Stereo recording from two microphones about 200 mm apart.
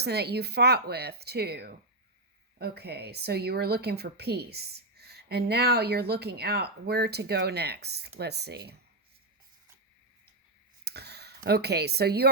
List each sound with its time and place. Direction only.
0.0 s a woman's voice: 55° right (ahead or behind)
10.8 s a sound: 55° right (ahead or behind)
11.4 s a woman's voice: 55° right (ahead or behind)